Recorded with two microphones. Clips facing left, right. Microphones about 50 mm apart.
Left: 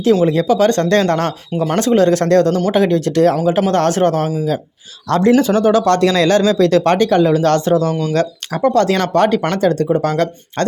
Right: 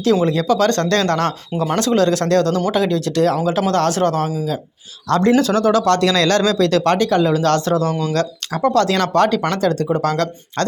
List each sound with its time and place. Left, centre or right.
0.3 s speech: centre; by 3.3 s left
3.3 s speech: centre
3.7 s speech: left
5.4 s speech: left